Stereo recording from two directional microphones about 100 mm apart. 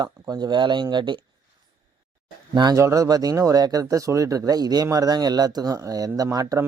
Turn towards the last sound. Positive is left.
turn(degrees=-35)  # may be behind; listen again after turning